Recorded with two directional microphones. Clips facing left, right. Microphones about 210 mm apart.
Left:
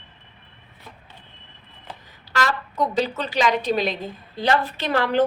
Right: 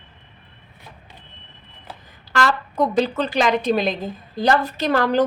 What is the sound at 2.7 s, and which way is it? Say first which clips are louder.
A woman's voice: right 4 dB; 50° right (ahead or behind).